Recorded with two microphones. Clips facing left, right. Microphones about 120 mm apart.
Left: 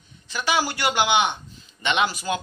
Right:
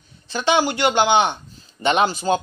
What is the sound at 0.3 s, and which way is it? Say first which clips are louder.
Speech: right 5 dB; 25° right (ahead or behind).